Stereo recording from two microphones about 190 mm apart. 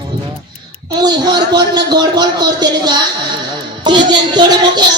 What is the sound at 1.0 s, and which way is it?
A man's voice, 20° right (ahead or behind).